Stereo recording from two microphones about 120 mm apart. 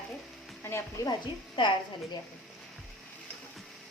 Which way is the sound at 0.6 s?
20° left (ahead or behind).